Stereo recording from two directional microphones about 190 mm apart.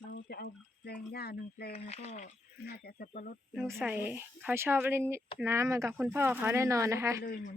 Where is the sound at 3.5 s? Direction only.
10° right (ahead or behind).